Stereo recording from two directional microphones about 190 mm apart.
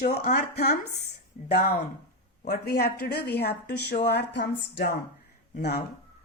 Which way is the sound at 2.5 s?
60° left (ahead or behind).